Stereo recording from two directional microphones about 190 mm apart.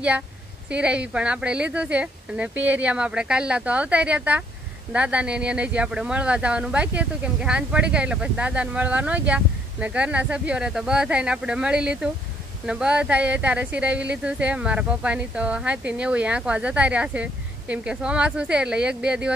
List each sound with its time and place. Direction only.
0.7 s speech: 5° right (ahead or behind)